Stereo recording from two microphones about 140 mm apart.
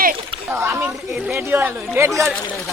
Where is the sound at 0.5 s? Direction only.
15° right (ahead or behind).